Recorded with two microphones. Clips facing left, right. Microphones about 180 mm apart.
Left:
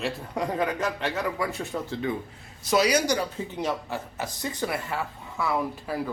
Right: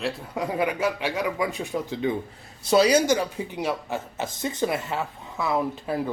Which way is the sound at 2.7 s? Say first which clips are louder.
Right 4 dB; 30° right (ahead or behind).